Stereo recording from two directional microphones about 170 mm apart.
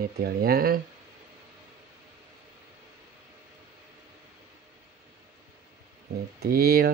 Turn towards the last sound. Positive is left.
turn(degrees=-60)  # may be behind; listen again after turning